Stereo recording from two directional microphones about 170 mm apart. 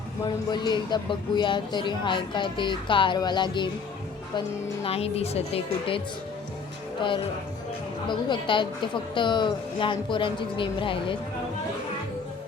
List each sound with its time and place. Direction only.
0.3 s speech: 25° left (ahead or behind)
7.0 s speech: 30° left (ahead or behind)